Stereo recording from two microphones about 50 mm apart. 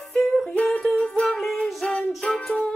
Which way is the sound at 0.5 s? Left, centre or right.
Left.